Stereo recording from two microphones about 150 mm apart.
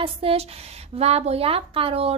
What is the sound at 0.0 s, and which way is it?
A woman's voice, 40° right (ahead or behind).